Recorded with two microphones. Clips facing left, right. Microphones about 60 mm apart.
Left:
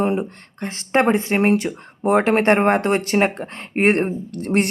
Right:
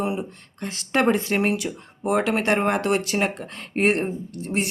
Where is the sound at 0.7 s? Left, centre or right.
Left.